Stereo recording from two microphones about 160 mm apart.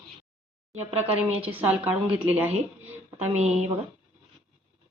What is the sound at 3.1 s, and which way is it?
Speech, 45° right (ahead or behind).